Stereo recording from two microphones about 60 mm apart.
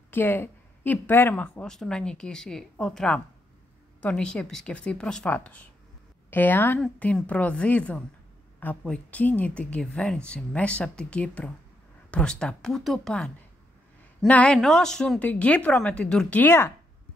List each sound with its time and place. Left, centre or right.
0.1 s speech: left
1.6 s speech: centre
5.3 s speech: left
7.2 s speech: left; by 13.1 s centre
14.2 s speech: centre
14.6 s speech: centre
15.1 s speech: left
16.4 s speech: left